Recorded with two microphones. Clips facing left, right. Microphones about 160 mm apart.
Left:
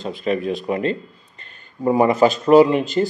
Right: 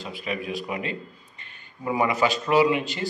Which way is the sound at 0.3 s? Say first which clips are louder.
Left 9 dB; 40° left (ahead or behind).